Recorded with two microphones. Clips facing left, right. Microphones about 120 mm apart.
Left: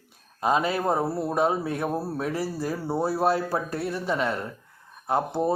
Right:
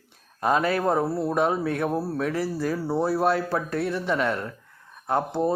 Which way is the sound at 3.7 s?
35° left (ahead or behind).